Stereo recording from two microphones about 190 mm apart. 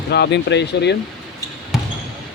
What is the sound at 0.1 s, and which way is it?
Speech, 60° left (ahead or behind).